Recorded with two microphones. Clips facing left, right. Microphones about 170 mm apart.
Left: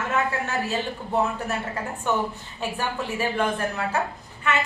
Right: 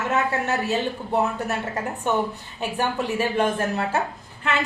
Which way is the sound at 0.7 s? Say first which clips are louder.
Right 3 dB; 20° right (ahead or behind).